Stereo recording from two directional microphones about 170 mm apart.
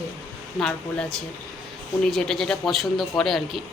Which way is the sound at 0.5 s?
5° left (ahead or behind).